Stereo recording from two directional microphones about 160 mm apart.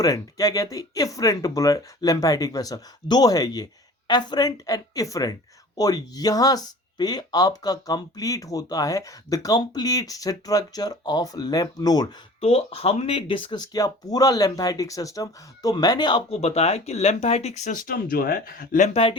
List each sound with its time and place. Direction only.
0.0 s speech: 20° left (ahead or behind)
12.4 s speech: 40° left (ahead or behind)
16.3 s speech: 40° left (ahead or behind); by 18.9 s 60° left (ahead or behind)